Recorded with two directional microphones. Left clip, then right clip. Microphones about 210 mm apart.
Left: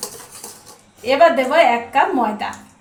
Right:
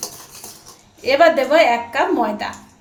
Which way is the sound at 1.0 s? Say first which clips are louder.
Even; 30° right (ahead or behind).